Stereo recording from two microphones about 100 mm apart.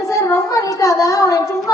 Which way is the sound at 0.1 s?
30° left (ahead or behind).